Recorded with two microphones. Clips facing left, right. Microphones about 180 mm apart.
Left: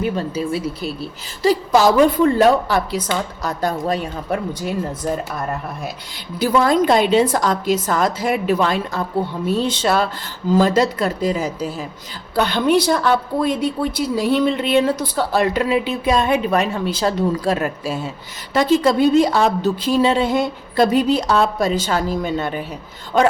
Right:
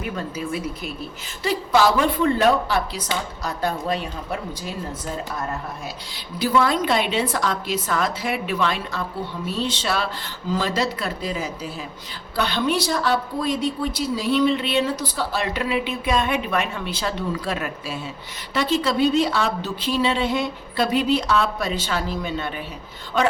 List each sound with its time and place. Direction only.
0.0 s a woman's voice: 30° left (ahead or behind)
6.4 s a woman's voice: 45° left (ahead or behind)